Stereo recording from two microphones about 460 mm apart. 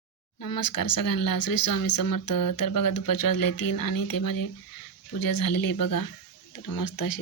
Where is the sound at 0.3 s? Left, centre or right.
Left.